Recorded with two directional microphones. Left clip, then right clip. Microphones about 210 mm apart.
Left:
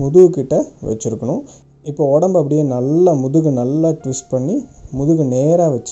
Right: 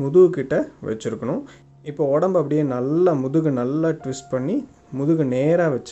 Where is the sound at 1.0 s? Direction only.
30° right (ahead or behind).